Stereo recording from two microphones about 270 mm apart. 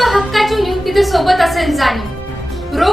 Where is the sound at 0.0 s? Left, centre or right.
Centre.